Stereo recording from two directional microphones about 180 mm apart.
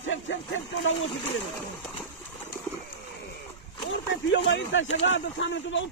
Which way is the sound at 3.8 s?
80° left.